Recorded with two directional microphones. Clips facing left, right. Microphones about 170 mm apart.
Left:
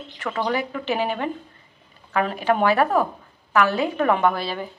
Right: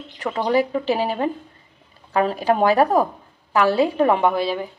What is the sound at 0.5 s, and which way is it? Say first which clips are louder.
A woman's voice: right 8 dB; 35° right (ahead or behind).